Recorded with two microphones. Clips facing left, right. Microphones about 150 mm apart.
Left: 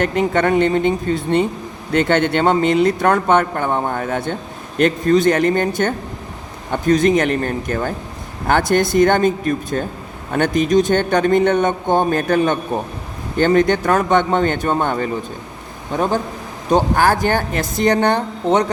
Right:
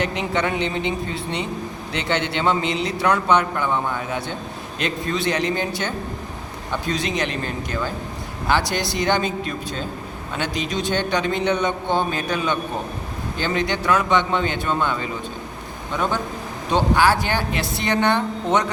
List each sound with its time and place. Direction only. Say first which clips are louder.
0.0 s a man's voice: left 6 dB; 50° left (ahead or behind)